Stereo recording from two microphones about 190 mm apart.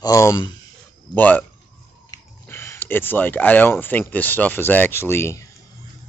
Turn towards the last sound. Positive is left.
turn(degrees=15)  # may be behind; listen again after turning